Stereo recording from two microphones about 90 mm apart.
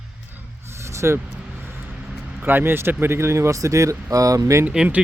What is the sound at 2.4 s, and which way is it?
Speech, 25° right (ahead or behind).